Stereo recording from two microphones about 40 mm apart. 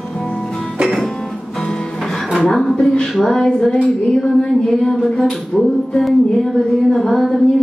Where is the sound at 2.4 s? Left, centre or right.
Centre.